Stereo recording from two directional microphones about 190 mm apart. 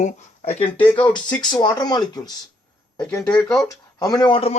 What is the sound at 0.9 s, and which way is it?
Speech, 25° left (ahead or behind).